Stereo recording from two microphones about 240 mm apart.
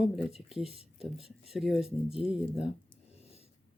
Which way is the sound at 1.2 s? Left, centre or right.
Centre.